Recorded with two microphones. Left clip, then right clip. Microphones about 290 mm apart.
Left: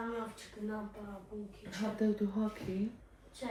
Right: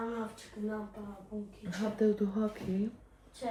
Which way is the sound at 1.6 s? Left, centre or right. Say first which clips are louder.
Right 5 dB; right.